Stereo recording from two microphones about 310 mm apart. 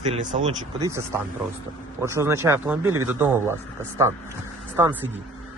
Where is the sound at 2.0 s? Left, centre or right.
Centre.